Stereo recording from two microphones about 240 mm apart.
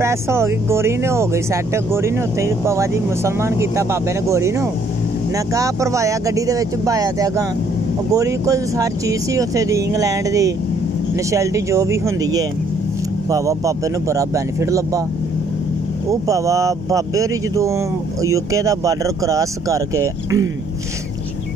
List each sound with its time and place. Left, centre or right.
0.0 s speech: centre
16.1 s speech: centre